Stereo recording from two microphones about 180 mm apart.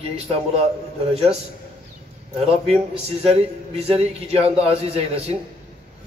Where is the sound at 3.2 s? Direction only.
35° right (ahead or behind).